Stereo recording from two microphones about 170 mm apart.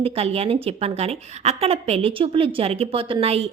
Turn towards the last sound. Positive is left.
turn(degrees=-35)  # may be behind; listen again after turning